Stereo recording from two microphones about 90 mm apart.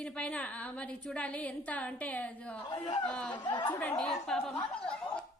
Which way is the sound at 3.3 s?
55° left (ahead or behind).